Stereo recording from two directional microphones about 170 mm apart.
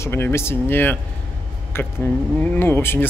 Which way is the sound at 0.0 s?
15° left (ahead or behind).